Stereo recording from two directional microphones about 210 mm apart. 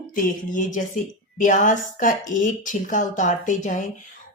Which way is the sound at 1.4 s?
35° left (ahead or behind).